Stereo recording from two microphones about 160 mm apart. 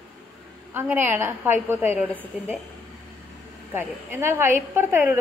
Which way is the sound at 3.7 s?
15° right (ahead or behind).